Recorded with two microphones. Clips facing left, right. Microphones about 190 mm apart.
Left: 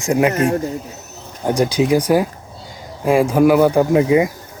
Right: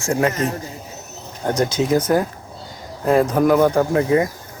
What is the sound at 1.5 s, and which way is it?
Speech, 15° left (ahead or behind).